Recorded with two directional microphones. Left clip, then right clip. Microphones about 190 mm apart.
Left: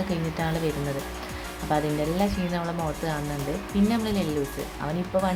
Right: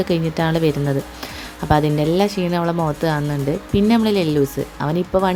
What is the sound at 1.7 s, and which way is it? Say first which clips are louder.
Speech: right 9 dB; 45° right (ahead or behind).